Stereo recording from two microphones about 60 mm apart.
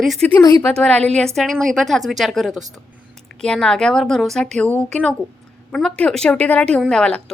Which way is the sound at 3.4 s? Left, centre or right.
Centre.